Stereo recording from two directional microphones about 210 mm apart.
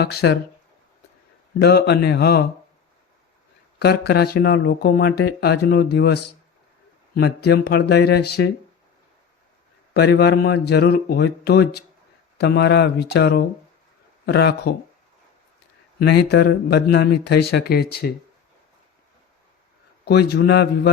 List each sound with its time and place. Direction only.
0.0 s speech: 50° left (ahead or behind)
1.6 s speech: 50° left (ahead or behind)
3.8 s speech: 50° left (ahead or behind)
9.9 s speech: 50° left (ahead or behind)
16.0 s speech: 50° left (ahead or behind)
20.1 s speech: 50° left (ahead or behind)